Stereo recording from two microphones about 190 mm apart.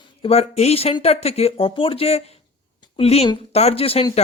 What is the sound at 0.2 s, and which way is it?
Speech, 30° left (ahead or behind).